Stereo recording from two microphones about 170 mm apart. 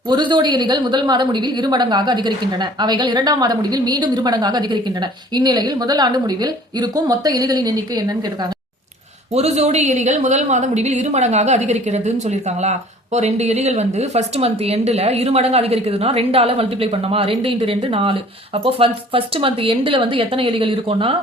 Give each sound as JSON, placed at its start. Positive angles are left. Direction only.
{"t": 0.1, "sound": "a woman's voice", "side_deg": -25}
{"t": 9.3, "sound": "a woman's voice", "side_deg": -40}